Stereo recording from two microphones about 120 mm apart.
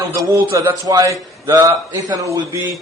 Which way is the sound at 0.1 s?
30° right (ahead or behind).